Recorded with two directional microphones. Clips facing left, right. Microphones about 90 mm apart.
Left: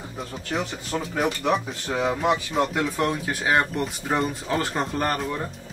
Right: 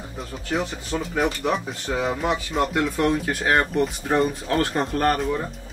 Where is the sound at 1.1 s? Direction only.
Centre (ahead or behind).